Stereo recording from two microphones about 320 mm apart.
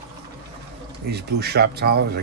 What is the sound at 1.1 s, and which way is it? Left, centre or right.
Speech, right.